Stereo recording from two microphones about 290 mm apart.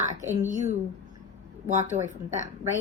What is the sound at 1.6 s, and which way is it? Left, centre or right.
Speech, right.